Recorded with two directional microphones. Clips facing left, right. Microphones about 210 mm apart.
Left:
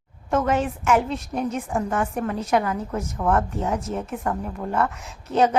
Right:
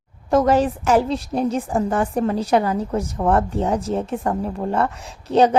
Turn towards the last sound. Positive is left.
turn(degrees=-30)  # may be behind; listen again after turning